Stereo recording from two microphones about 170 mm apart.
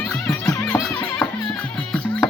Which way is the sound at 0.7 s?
20° left (ahead or behind).